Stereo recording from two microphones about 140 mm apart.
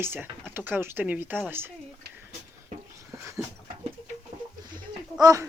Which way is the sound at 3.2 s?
20° right (ahead or behind).